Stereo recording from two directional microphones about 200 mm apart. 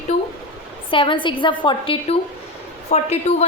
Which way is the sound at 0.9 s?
25° left (ahead or behind).